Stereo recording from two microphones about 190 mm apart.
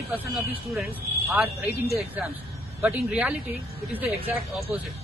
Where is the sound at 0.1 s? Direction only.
10° right (ahead or behind).